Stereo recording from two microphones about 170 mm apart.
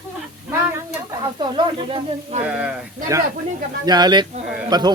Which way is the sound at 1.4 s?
30° right (ahead or behind).